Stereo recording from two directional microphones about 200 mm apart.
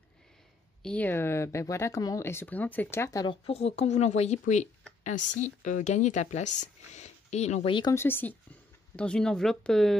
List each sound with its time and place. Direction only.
0.8 s speech: 10° left (ahead or behind)
3.4 s speech: 30° left (ahead or behind); by 9.9 s centre (ahead or behind)